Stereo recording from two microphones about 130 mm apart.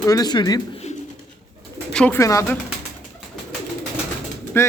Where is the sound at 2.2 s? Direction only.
25° left (ahead or behind).